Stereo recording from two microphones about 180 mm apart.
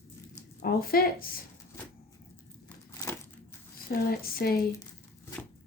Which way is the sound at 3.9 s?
55° left (ahead or behind).